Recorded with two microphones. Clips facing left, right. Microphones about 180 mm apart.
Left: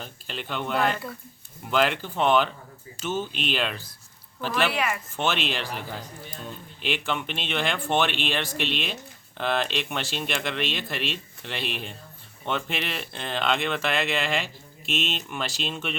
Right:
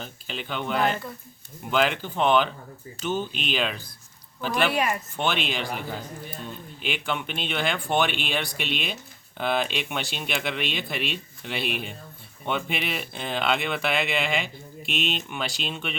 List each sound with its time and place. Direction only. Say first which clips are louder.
0.0 s speech: right 1 dB; centre (ahead or behind)
4.7 s speech: right 2 dB; 30° right (ahead or behind)
5.5 s speech: right 1 dB; 5° right (ahead or behind)